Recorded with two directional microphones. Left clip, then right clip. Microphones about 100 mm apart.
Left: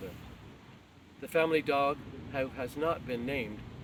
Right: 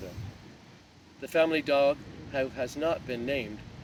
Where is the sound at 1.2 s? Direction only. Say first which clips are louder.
Right 3 dB; 25° left (ahead or behind).